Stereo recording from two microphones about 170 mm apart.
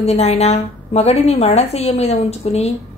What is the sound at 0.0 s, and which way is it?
A woman's voice, 40° left (ahead or behind).